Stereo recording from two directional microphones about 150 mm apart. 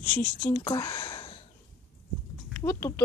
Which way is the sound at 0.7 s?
30° left (ahead or behind).